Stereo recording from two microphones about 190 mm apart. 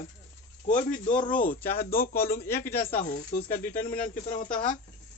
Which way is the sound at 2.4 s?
10° left (ahead or behind).